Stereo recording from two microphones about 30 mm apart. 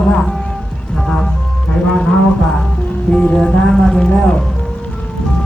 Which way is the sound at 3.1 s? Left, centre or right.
Left.